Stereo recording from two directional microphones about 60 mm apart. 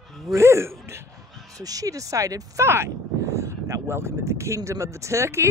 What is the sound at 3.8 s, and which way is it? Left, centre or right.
Speech, right.